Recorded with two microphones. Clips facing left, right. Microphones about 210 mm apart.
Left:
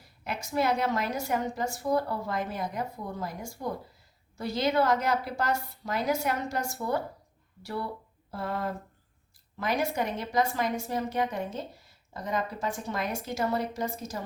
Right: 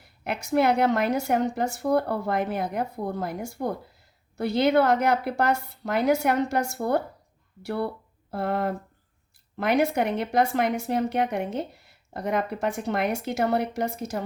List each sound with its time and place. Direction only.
0.0 s speech: 65° right (ahead or behind)